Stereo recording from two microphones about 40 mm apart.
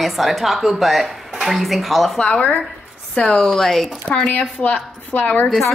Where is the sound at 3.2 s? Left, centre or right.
Left.